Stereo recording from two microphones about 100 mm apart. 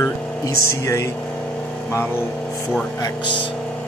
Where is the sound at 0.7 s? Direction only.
30° left (ahead or behind).